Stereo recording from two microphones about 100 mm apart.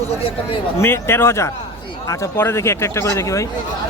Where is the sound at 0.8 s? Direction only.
25° left (ahead or behind).